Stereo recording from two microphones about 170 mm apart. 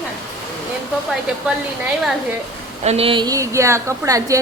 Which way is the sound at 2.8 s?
35° right (ahead or behind).